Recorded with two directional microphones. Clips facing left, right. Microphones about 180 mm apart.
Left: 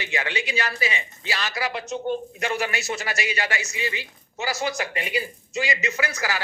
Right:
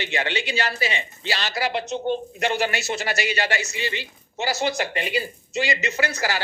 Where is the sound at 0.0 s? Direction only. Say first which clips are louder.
Right 2 dB; 30° right (ahead or behind).